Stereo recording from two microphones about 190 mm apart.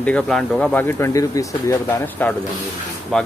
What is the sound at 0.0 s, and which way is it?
Speech, 5° left (ahead or behind).